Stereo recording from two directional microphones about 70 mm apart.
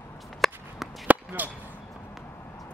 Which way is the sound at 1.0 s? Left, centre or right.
Right.